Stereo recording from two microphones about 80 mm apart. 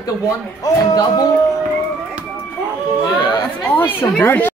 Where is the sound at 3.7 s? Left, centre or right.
Left.